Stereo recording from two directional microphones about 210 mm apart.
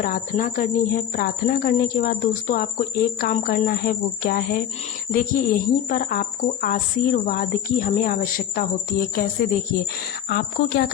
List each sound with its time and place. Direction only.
0.0 s speech: 40° left (ahead or behind)